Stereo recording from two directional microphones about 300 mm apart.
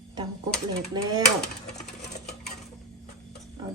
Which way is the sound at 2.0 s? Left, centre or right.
Left.